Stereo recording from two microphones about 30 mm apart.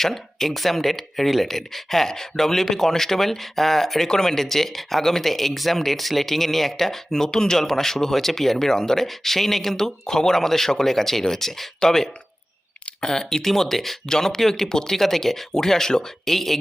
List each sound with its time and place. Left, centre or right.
0.0 s speech: centre
13.1 s speech: centre
14.1 s speech: centre